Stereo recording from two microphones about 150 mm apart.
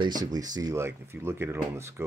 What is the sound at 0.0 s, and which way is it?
Speech, 25° right (ahead or behind).